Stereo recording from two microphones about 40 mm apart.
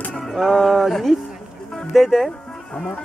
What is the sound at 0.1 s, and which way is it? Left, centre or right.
Music, centre.